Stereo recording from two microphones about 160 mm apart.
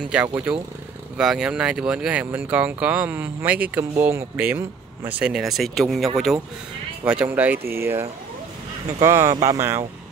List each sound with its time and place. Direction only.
0.0 s speech: 5° right (ahead or behind)